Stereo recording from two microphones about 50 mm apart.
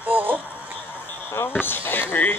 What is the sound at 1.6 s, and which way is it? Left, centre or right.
Speech, left.